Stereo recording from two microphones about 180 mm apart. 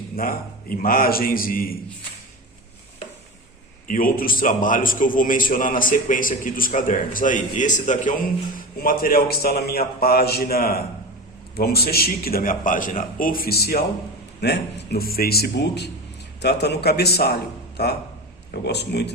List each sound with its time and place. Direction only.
0.2 s a man's voice: 55° left (ahead or behind)
3.8 s a man's voice: 50° left (ahead or behind); by 19.1 s 70° left (ahead or behind)